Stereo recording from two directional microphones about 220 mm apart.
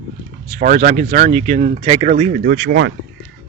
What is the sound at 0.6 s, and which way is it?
Speech, 40° right (ahead or behind).